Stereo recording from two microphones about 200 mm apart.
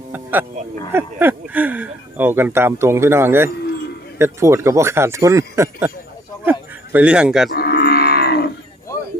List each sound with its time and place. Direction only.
0.1 s music: 10° right (ahead or behind)
0.9 s speech: 10° right (ahead or behind)
7.5 s wild animals: 50° left (ahead or behind)